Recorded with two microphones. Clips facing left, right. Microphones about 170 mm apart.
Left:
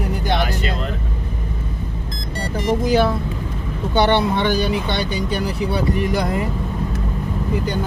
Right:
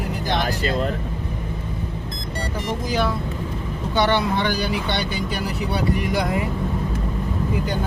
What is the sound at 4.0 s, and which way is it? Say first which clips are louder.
Speech: left 3 dB; 25° left (ahead or behind).